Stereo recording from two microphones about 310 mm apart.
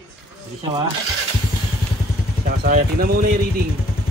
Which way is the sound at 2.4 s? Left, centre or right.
Right.